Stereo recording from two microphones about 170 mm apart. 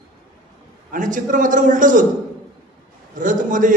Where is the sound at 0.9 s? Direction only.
50° right (ahead or behind).